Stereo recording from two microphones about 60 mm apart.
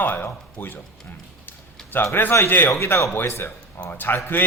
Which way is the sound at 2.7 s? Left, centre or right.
Left.